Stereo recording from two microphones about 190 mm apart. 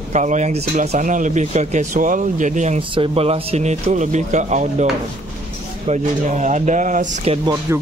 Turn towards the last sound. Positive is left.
turn(degrees=-15)  # may be behind; listen again after turning